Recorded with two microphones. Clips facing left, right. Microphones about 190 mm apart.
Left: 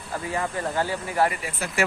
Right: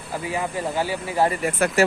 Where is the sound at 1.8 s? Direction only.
40° right (ahead or behind).